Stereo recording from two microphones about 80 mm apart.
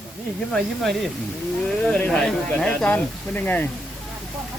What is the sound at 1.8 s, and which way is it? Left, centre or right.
Speech, centre.